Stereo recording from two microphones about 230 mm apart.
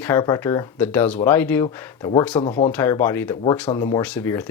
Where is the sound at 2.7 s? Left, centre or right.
Centre.